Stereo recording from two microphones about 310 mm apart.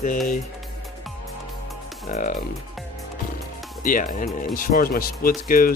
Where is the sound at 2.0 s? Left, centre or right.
Left.